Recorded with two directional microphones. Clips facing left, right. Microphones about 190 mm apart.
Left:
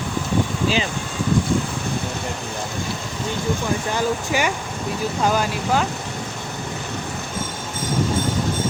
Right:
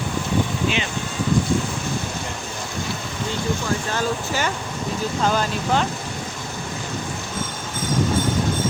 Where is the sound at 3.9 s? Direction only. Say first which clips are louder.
Left 2 dB; 15° left (ahead or behind).